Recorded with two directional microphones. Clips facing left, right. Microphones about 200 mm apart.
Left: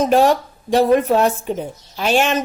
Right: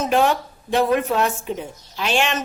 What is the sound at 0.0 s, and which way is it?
Speech, 35° left (ahead or behind).